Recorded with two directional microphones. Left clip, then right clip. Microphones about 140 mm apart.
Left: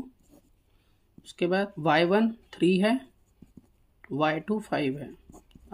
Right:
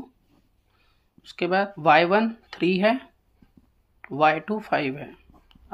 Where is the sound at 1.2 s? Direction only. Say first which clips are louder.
Right 4 dB; 30° left (ahead or behind).